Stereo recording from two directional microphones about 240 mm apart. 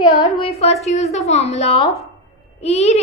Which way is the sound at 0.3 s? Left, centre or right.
Left.